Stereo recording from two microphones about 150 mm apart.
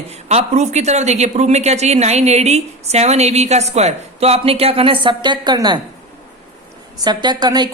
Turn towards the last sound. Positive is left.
turn(degrees=-30)  # may be behind; listen again after turning